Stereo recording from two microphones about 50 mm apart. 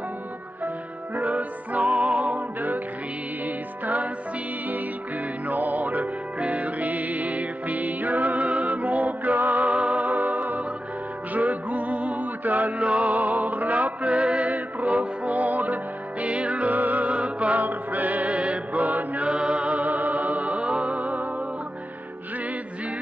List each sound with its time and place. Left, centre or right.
1.1 s music: right
2.3 s music: right
5.5 s music: right